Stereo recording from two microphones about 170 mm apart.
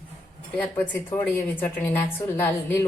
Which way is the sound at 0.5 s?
10° left (ahead or behind).